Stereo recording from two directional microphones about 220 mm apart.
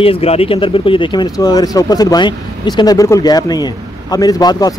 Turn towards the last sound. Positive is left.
turn(degrees=15)  # may be behind; listen again after turning